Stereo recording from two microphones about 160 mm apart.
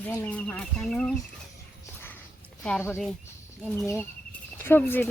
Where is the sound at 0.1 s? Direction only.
10° left (ahead or behind).